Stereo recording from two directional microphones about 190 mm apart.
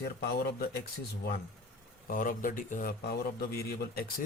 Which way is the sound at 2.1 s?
45° left (ahead or behind).